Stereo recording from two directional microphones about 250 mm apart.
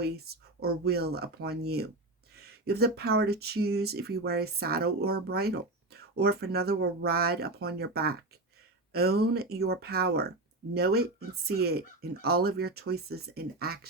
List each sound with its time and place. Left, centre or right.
0.0 s speech: right